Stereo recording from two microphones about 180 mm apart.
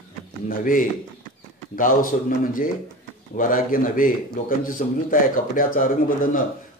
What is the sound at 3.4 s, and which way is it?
Speech, 50° left (ahead or behind).